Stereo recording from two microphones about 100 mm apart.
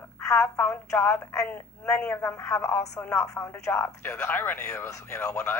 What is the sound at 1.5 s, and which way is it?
Speech, 10° left (ahead or behind).